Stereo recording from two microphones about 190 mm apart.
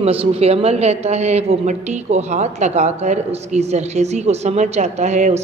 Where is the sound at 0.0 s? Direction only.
30° right (ahead or behind).